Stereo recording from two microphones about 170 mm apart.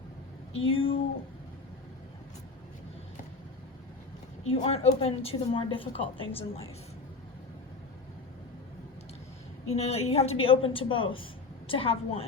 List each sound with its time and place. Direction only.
0.6 s a woman's voice: 35° left (ahead or behind)
4.4 s a woman's voice: 40° left (ahead or behind)
9.7 s a woman's voice: 40° left (ahead or behind)